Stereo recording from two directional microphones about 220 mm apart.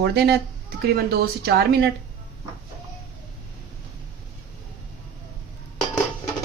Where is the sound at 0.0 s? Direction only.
50° right (ahead or behind).